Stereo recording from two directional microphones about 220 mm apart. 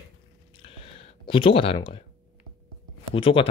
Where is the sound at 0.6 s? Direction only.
25° left (ahead or behind).